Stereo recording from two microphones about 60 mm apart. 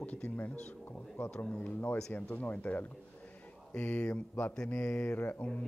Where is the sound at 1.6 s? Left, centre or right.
Left.